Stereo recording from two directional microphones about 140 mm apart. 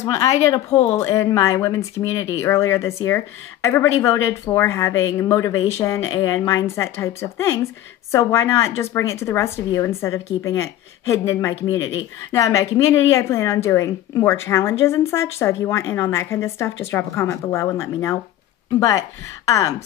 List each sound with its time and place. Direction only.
0.0 s a woman's voice: 30° left (ahead or behind)